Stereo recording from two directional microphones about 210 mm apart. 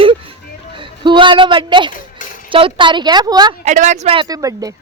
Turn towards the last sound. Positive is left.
turn(degrees=-15)  # may be behind; listen again after turning